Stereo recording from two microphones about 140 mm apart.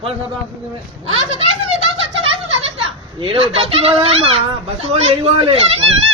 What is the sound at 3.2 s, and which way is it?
Speech, 40° right (ahead or behind).